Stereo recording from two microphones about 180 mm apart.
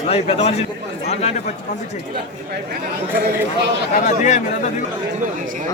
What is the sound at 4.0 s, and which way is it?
Speech, 40° left (ahead or behind).